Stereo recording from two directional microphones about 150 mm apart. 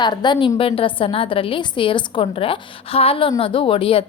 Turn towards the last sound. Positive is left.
turn(degrees=35)  # may be behind; listen again after turning